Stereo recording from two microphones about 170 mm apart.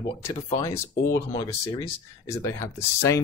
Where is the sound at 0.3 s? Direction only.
20° left (ahead or behind).